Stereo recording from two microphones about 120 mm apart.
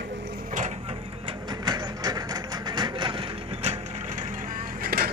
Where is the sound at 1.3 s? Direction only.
35° right (ahead or behind); by 4.2 s 60° right (ahead or behind).